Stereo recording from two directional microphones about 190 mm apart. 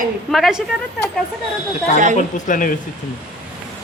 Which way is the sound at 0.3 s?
Centre (ahead or behind).